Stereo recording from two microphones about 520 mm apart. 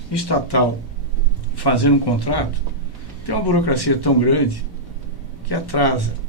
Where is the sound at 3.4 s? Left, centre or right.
Left.